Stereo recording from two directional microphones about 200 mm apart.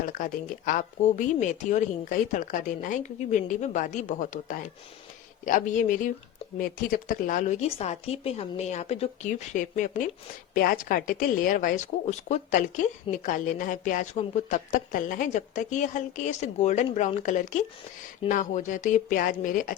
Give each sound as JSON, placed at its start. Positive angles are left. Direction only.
{"t": 0.0, "sound": "a woman's voice", "side_deg": 40}